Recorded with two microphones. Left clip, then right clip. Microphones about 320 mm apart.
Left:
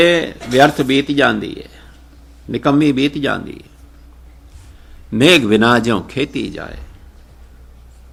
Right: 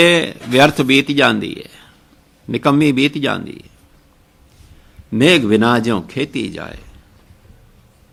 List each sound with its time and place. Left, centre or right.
0.0 s speech: right
5.1 s a man's voice: centre